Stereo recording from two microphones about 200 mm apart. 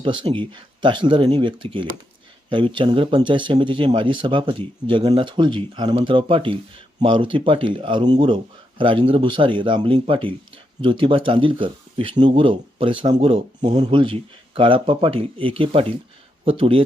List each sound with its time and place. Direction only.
0.0 s speech: 25° right (ahead or behind)